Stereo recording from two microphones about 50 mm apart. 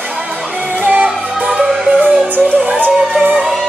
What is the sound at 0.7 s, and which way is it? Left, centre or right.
Music, right.